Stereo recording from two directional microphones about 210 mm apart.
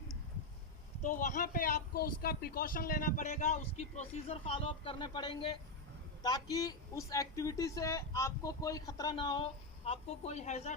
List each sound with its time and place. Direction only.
1.0 s a man's voice: 35° left (ahead or behind)